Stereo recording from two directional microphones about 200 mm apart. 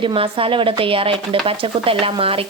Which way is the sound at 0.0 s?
25° right (ahead or behind).